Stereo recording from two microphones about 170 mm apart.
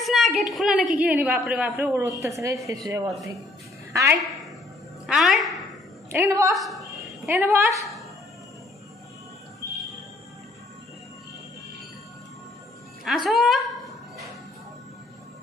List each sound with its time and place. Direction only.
0.0 s a woman's voice: centre (ahead or behind); by 2.8 s 20° right (ahead or behind)
3.1 s a woman's voice: centre (ahead or behind)
3.9 s a woman's voice: 15° right (ahead or behind)
5.0 s a woman's voice: centre (ahead or behind)
6.1 s a woman's voice: 15° right (ahead or behind)
6.5 s a woman's voice: centre (ahead or behind)
7.3 s a woman's voice: 15° right (ahead or behind)
13.0 s music: centre (ahead or behind)